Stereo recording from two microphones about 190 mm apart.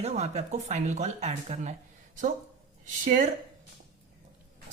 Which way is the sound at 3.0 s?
45° right (ahead or behind).